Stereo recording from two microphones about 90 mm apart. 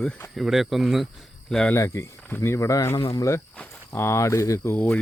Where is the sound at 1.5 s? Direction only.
10° left (ahead or behind).